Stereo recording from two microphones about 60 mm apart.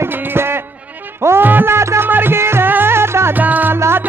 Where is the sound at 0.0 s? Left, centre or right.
Right.